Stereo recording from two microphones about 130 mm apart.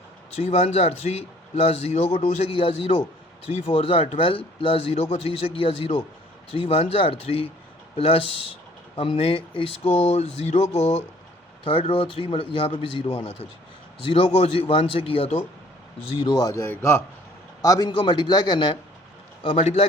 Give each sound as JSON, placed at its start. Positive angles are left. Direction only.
{"t": 0.5, "sound": "a man's voice", "side_deg": 50}
{"t": 16.1, "sound": "a man's voice", "side_deg": 35}